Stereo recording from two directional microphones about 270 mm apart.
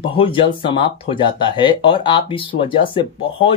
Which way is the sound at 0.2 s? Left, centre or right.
Centre.